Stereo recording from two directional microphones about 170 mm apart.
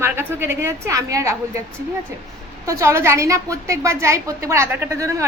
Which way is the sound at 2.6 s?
15° right (ahead or behind).